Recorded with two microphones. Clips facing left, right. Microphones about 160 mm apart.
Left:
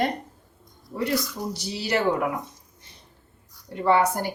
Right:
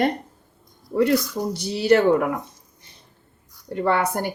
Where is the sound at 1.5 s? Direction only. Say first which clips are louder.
Right 12 dB; 55° right (ahead or behind).